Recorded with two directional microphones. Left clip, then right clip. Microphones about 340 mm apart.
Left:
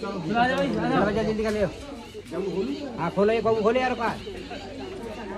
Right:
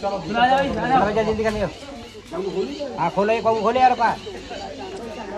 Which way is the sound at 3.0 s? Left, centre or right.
Right.